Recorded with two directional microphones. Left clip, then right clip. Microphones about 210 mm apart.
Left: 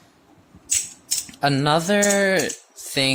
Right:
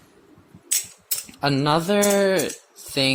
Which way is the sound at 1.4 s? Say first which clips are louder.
Left 1 dB; 20° left (ahead or behind).